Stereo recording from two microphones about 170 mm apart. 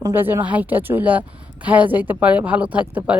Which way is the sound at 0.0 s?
10° right (ahead or behind).